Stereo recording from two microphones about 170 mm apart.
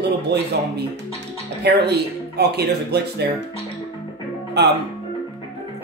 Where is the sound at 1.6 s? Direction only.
75° right (ahead or behind).